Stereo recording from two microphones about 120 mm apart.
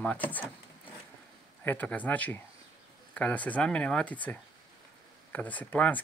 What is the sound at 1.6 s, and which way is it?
Speech, 15° left (ahead or behind).